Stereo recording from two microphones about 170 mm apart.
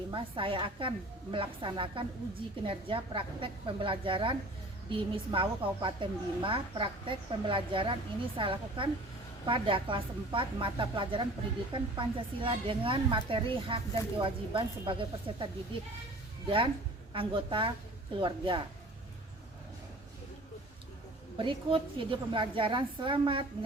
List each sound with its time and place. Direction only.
0.1 s a woman's voice: 30° right (ahead or behind)
17.1 s a woman's voice: 30° right (ahead or behind)
21.3 s a woman's voice: 30° right (ahead or behind)